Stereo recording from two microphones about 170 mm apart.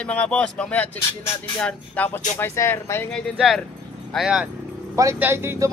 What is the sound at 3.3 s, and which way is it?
Speech, centre (ahead or behind).